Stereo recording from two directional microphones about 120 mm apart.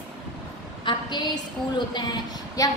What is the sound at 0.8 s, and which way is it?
A woman's voice, 40° left (ahead or behind).